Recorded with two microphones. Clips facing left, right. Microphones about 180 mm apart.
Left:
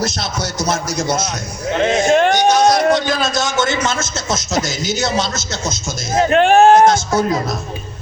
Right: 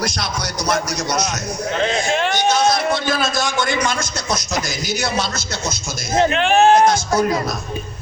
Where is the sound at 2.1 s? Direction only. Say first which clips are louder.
Left 7 dB; 55° left (ahead or behind).